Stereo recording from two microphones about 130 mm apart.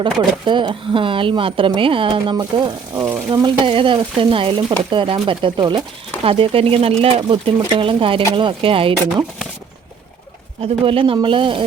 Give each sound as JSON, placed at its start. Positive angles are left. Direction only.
{"t": 0.0, "sound": "stir", "side_deg": -35}
{"t": 6.2, "sound": "speech", "side_deg": -45}
{"t": 10.6, "sound": "stir", "side_deg": -45}